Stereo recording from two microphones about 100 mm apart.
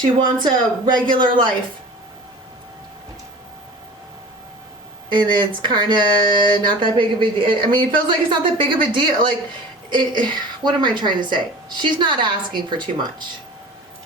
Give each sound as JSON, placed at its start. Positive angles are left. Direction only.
{"t": 0.2, "sound": "speech", "side_deg": -50}
{"t": 5.0, "sound": "speech", "side_deg": -50}